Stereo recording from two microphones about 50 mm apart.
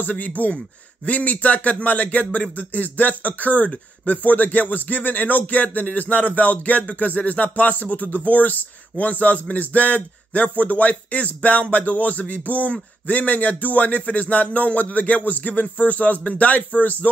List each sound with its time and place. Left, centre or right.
0.0 s a man's voice: left